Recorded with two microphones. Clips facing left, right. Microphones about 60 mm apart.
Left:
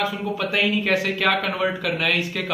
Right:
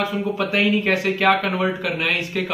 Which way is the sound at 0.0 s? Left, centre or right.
Right.